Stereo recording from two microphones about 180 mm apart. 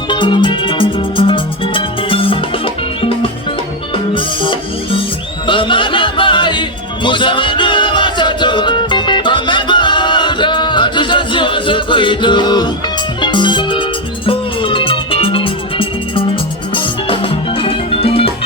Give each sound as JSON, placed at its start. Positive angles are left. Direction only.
{"t": 0.1, "sound": "music", "side_deg": 25}
{"t": 3.9, "sound": "music", "side_deg": 30}